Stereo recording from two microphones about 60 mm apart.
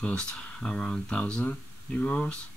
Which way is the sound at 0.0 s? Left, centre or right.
Centre.